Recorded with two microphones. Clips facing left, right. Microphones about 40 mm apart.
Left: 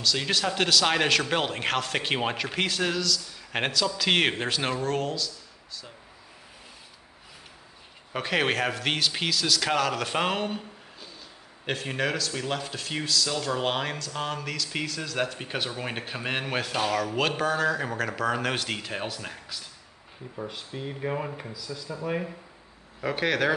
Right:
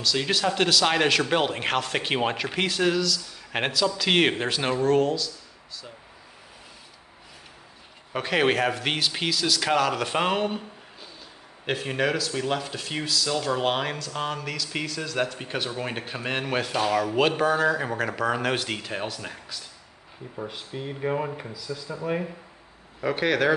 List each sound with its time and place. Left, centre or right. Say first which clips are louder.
0.0 s speech: right 2 dB; centre
8.1 s speech: right 3 dB; centre